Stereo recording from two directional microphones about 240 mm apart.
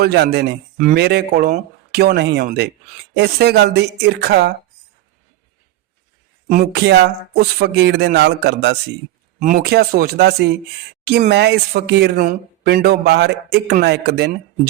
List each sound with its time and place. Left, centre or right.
0.0 s speech: right
6.5 s speech: right